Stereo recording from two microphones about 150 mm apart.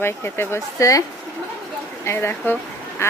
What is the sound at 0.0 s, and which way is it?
Speech, 15° left (ahead or behind).